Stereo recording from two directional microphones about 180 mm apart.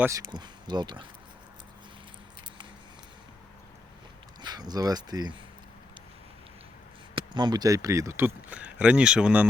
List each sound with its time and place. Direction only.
0.0 s speech: 20° right (ahead or behind)
4.4 s speech: 25° right (ahead or behind)
7.2 s speech: 25° right (ahead or behind); by 9.5 s 5° right (ahead or behind)